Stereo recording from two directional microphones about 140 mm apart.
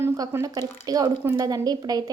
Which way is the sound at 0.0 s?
20° right (ahead or behind).